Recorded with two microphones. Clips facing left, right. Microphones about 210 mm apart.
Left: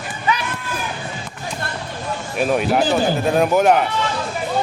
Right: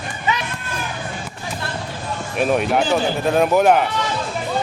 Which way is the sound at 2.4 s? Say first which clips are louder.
Even; centre (ahead or behind).